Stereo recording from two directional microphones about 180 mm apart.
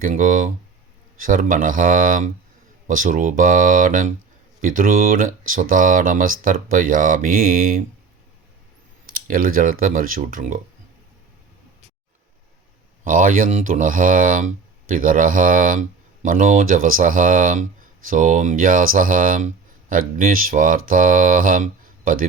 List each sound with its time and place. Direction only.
0.0 s speech: 45° right (ahead or behind)
9.1 s speech: 50° right (ahead or behind)
13.1 s speech: 50° right (ahead or behind)